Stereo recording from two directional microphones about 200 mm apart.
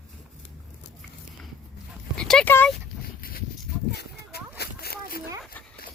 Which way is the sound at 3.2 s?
45° left (ahead or behind).